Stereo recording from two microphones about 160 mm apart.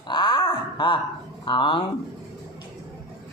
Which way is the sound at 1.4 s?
30° left (ahead or behind).